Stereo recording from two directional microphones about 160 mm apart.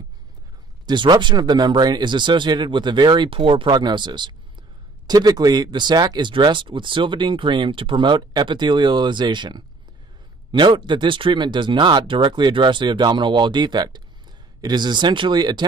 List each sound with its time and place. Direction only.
0.8 s speech: 30° right (ahead or behind)